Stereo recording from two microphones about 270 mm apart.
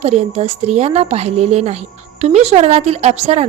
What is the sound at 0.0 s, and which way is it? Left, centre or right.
A woman's voice, right.